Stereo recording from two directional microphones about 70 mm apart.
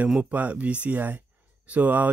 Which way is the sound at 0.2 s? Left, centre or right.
Right.